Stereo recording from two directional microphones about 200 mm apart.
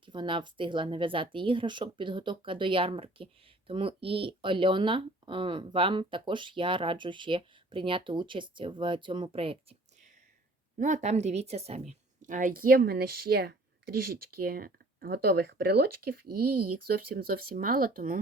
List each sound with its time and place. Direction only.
0.0 s speech: 25° right (ahead or behind)
10.8 s a woman's voice: 40° right (ahead or behind)